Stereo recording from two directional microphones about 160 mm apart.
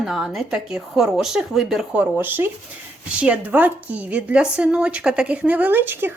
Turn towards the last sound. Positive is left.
turn(degrees=-15)  # may be behind; listen again after turning